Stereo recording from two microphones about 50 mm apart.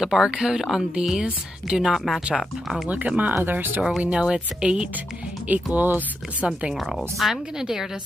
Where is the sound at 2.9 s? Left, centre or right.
Right.